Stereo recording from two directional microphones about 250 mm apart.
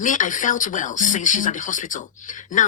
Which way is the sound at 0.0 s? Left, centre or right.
Left.